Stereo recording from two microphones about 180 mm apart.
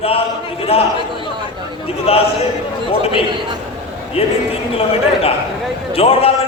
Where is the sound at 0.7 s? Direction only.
30° left (ahead or behind).